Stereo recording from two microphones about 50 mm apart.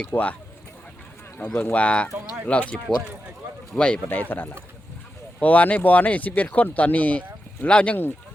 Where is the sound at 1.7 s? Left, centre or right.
Left.